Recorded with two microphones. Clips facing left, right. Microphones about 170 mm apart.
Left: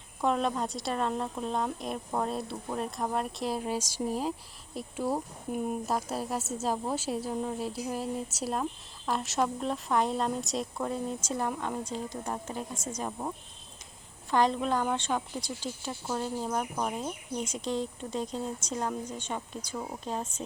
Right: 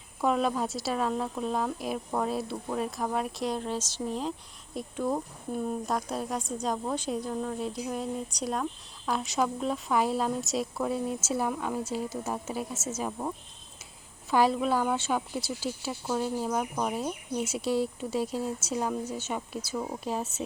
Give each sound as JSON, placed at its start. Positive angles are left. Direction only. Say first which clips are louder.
{"t": 0.2, "sound": "a woman's voice", "louder": "right 2 dB", "side_deg": -5}